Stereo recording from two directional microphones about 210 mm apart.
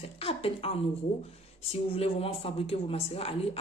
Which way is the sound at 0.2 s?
25° left (ahead or behind).